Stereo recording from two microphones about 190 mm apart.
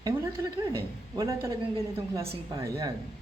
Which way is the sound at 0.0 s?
15° right (ahead or behind).